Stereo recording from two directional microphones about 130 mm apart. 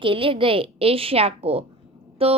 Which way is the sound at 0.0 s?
45° right (ahead or behind).